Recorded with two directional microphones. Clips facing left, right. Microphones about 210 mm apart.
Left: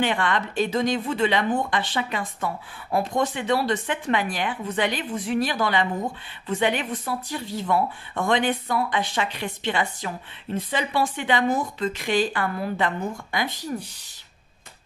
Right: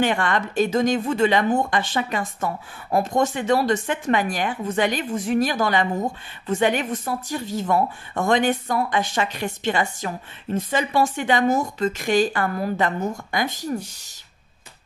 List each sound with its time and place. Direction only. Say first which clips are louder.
0.0 s a woman's voice: right 2 dB; 45° right (ahead or behind)